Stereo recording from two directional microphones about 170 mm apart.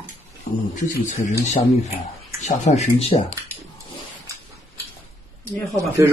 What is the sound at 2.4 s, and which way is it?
Speech, 45° left (ahead or behind).